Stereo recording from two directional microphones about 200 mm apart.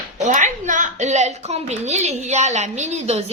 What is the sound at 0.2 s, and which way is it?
A woman's voice, 40° right (ahead or behind).